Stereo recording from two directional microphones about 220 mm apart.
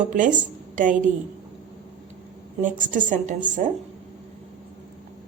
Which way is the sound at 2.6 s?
35° right (ahead or behind).